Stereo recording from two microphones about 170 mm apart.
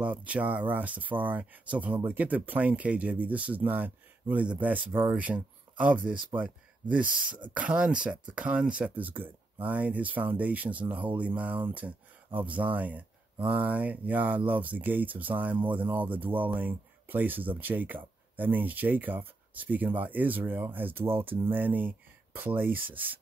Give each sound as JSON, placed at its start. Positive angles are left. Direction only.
{"t": 0.0, "sound": "speech", "side_deg": -10}